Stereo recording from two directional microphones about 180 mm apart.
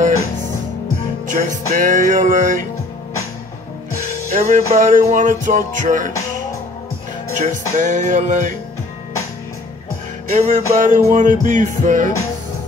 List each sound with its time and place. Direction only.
1.2 s music: 45° right (ahead or behind)
4.3 s music: 40° right (ahead or behind)
7.3 s music: 45° right (ahead or behind)
10.3 s music: 40° right (ahead or behind)